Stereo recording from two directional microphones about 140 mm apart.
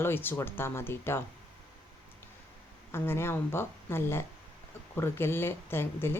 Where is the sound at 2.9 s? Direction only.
15° left (ahead or behind).